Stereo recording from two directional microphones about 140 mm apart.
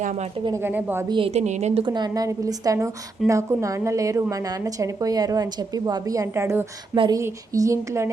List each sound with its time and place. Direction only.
0.0 s speech: 60° right (ahead or behind)
0.5 s a woman's voice: 15° right (ahead or behind)
1.0 s speech: 35° right (ahead or behind)
1.3 s a woman's voice: 55° right (ahead or behind)
1.8 s a woman's voice: 30° right (ahead or behind)
6.9 s speech: 35° right (ahead or behind)
7.2 s a woman's voice: 20° right (ahead or behind)